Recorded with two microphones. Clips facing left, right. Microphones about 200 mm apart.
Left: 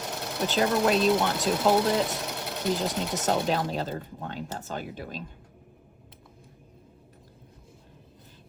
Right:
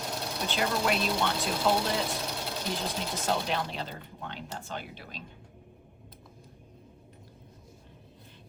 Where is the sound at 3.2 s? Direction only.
45° left (ahead or behind).